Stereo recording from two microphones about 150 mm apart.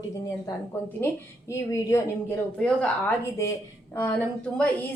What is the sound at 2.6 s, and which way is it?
Speech, 5° left (ahead or behind).